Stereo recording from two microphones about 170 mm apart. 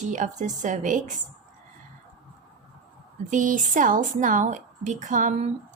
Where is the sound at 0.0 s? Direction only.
45° right (ahead or behind).